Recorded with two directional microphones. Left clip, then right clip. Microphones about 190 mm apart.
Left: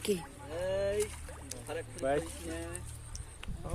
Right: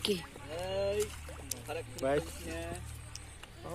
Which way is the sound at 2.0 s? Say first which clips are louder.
Even; 35° right (ahead or behind).